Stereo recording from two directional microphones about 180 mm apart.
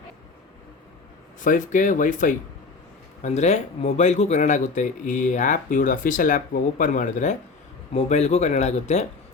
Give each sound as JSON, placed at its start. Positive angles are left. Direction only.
{"t": 1.4, "sound": "speech", "side_deg": 45}